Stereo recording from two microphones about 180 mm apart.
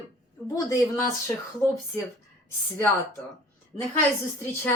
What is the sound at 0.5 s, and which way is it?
Speech, 20° left (ahead or behind).